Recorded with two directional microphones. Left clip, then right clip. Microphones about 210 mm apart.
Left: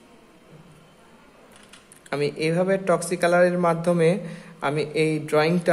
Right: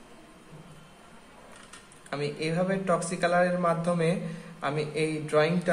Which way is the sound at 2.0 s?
45° left (ahead or behind).